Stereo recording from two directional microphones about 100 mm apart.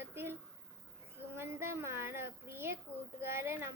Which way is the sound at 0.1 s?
25° right (ahead or behind).